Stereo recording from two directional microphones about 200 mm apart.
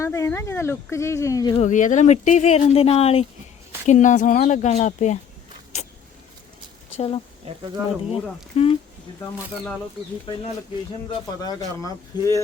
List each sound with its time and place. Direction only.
0.0 s speech: 15° left (ahead or behind)
1.5 s speech: 40° left (ahead or behind)
6.9 s speech: 30° left (ahead or behind)
11.4 s speech: 15° left (ahead or behind)